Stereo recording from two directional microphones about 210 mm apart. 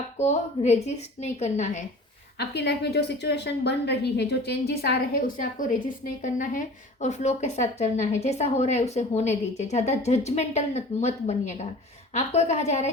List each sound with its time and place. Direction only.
0.2 s a woman's voice: 30° left (ahead or behind)
2.5 s a woman's voice: 50° left (ahead or behind); by 12.9 s 35° left (ahead or behind)